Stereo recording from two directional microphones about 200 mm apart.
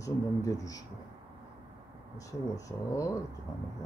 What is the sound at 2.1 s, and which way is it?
Speech, 15° left (ahead or behind).